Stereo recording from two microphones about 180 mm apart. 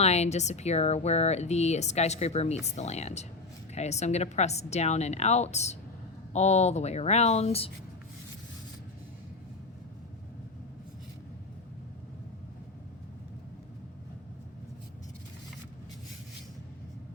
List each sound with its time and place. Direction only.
0.0 s speech: 35° left (ahead or behind)